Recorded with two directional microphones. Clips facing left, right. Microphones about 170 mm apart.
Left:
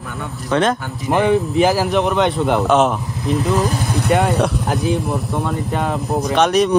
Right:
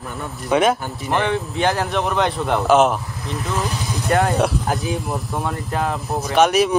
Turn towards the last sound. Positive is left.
turn(degrees=-5)  # may be behind; listen again after turning